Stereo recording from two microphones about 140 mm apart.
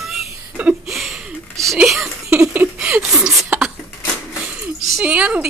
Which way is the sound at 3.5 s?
10° right (ahead or behind).